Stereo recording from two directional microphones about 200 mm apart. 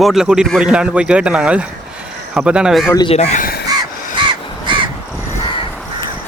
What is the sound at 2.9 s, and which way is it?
Speech, 20° left (ahead or behind).